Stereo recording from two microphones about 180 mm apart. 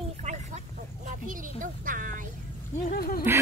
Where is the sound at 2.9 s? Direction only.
55° left (ahead or behind).